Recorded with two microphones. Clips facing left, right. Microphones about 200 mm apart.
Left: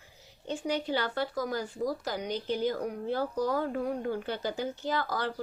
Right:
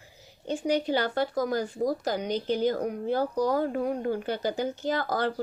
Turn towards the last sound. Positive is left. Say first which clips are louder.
# right 4 dB
turn(degrees=-45)  # may be behind; listen again after turning